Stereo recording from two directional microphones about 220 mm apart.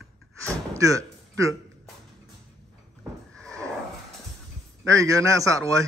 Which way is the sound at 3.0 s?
5° left (ahead or behind).